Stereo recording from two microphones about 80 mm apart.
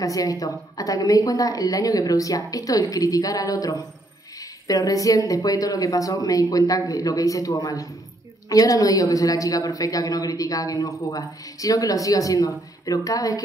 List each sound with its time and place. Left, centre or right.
0.0 s a woman's voice: left